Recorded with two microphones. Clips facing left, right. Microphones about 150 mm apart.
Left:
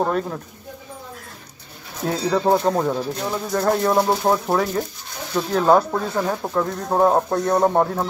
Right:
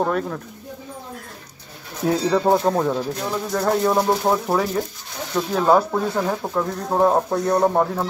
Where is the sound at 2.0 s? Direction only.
5° right (ahead or behind).